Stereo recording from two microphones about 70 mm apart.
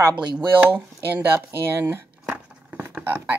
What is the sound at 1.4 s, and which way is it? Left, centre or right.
Speech, right.